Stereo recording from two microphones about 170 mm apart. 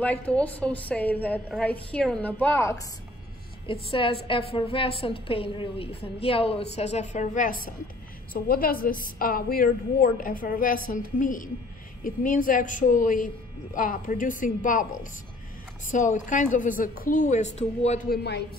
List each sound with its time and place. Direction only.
0.0 s a woman's voice: 10° left (ahead or behind)
3.6 s a woman's voice: 30° left (ahead or behind); by 14.9 s 50° left (ahead or behind)
15.9 s a woman's voice: 45° left (ahead or behind)
18.1 s speech: 75° left (ahead or behind)